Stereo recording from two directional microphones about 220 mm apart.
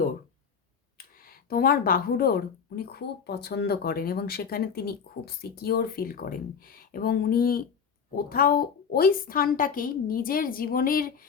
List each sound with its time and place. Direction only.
0.9 s a woman's voice: 40° left (ahead or behind)